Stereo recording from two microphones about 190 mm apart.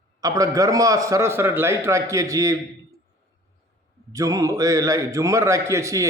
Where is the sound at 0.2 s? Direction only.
20° right (ahead or behind).